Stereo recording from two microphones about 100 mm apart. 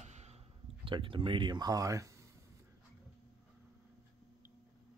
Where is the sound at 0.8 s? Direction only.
60° right (ahead or behind); by 2.1 s 35° right (ahead or behind).